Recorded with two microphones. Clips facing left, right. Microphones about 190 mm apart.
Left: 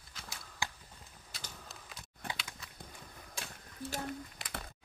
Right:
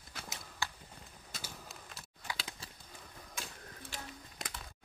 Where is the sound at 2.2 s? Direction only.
55° left (ahead or behind).